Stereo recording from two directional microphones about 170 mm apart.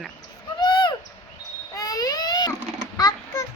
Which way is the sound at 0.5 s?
25° left (ahead or behind).